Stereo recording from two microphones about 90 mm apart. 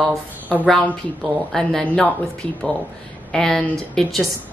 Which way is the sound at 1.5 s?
10° left (ahead or behind).